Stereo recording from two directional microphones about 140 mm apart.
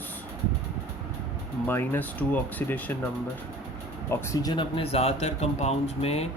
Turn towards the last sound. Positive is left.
turn(degrees=50)  # may be behind; listen again after turning